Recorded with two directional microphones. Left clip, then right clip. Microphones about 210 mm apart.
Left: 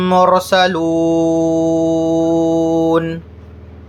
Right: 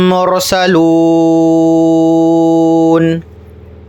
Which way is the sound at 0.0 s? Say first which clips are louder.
Right 1 dB; 35° right (ahead or behind).